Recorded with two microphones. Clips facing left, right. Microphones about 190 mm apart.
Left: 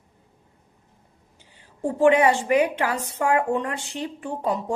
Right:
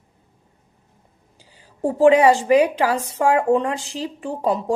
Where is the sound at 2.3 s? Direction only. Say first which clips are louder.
Right 5 dB; 35° right (ahead or behind).